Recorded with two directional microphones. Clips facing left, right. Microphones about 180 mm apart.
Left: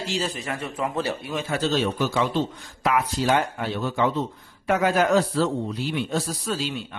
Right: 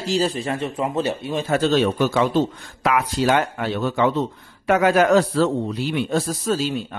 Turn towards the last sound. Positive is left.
turn(degrees=-45)  # may be behind; listen again after turning